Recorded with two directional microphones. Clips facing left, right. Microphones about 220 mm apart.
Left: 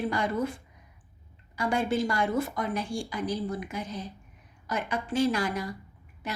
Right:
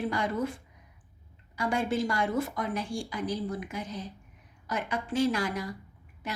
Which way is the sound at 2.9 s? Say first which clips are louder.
Left 1 dB; 30° left (ahead or behind).